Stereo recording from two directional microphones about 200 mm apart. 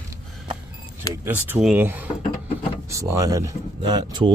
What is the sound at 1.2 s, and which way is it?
Speech, 10° right (ahead or behind).